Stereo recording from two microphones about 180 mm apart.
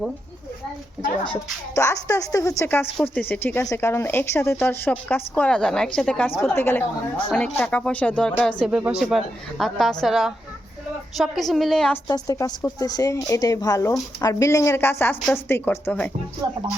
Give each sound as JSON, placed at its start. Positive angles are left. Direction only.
{"t": 1.7, "sound": "a woman's voice", "side_deg": 15}
{"t": 12.0, "sound": "speech", "side_deg": 20}
{"t": 16.4, "sound": "music", "side_deg": -25}